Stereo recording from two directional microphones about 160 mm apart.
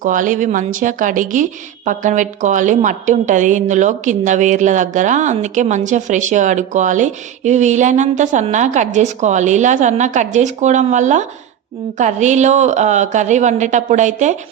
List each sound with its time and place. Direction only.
0.0 s a woman's voice: 55° right (ahead or behind)